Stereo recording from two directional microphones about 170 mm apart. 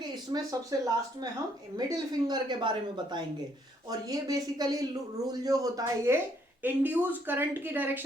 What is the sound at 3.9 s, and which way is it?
Speech, 20° right (ahead or behind).